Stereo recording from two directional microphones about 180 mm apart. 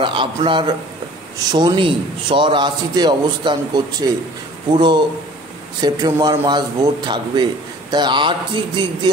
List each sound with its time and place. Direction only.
0.0 s a man's voice: 25° right (ahead or behind)